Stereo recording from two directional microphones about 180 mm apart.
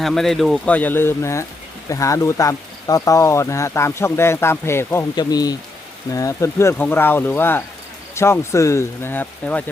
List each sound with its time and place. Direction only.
0.0 s speech: centre (ahead or behind)